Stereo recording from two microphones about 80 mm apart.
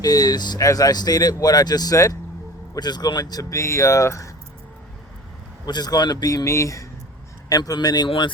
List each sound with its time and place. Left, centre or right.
0.0 s speech: left
0.6 s speech: left
2.7 s speech: left
3.6 s speech: left
5.6 s speech: left
7.5 s speech: left